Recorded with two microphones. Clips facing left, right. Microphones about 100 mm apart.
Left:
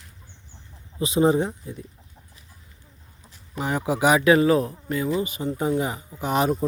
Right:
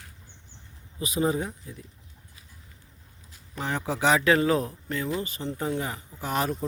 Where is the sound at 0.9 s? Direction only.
25° left (ahead or behind).